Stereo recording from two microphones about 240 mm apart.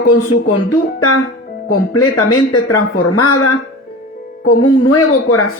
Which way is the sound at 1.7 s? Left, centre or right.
Left.